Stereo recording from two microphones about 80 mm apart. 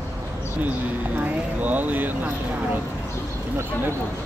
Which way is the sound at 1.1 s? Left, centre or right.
Right.